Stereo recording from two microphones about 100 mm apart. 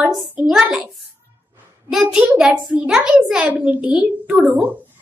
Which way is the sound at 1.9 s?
5° right (ahead or behind).